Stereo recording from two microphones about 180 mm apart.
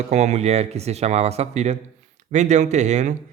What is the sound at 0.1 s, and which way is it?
A man's voice, 40° right (ahead or behind).